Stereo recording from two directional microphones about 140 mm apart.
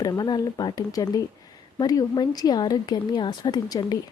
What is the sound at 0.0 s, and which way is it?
A woman's voice, 25° left (ahead or behind).